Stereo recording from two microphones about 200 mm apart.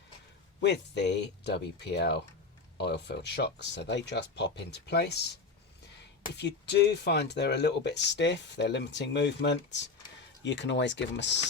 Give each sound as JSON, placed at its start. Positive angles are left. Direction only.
{"t": 0.6, "sound": "speech", "side_deg": 60}